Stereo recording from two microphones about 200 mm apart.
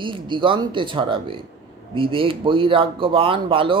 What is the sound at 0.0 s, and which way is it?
Speech, 25° right (ahead or behind).